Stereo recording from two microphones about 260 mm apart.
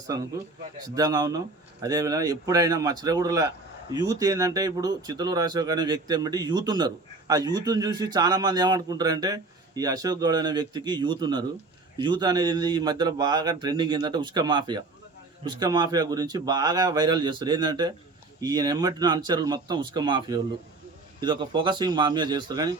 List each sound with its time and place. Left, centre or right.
0.9 s speech: centre